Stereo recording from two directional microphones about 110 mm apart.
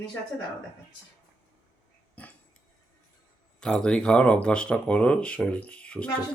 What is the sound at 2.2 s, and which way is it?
Dog, 15° left (ahead or behind).